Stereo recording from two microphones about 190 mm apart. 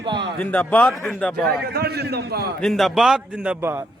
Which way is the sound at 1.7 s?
55° right (ahead or behind).